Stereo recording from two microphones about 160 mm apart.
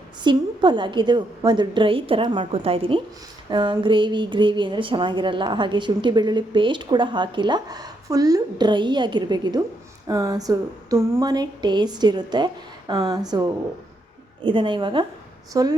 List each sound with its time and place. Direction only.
0.3 s a woman's voice: 30° right (ahead or behind)